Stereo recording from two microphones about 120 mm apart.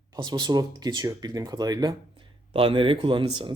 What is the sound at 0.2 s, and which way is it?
Speech, 40° right (ahead or behind).